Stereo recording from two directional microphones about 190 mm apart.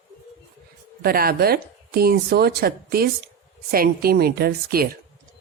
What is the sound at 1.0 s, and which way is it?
Speech, 55° right (ahead or behind).